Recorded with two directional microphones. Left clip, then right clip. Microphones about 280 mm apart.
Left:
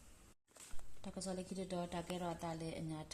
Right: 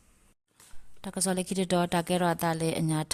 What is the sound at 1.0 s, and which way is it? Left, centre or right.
A woman's voice, right.